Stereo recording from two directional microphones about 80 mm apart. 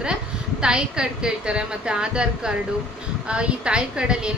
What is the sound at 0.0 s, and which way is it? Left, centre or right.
A woman's voice, centre.